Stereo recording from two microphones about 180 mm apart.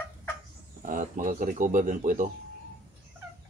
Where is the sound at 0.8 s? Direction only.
50° right (ahead or behind).